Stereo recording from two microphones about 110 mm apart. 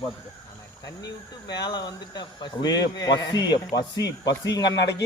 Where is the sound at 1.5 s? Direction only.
40° left (ahead or behind).